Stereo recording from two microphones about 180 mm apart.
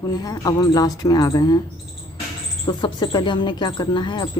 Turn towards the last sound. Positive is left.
turn(degrees=25)  # may be behind; listen again after turning